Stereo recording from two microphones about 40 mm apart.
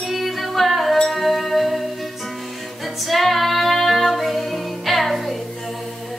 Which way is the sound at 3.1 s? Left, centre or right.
Centre.